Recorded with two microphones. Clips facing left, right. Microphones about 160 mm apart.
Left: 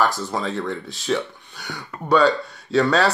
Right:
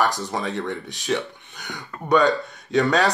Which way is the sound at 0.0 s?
20° right (ahead or behind).